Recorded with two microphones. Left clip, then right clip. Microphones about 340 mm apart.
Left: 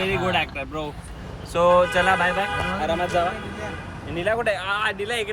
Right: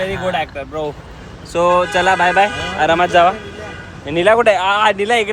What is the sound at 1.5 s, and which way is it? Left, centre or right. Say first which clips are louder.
Speech: right 4 dB; centre.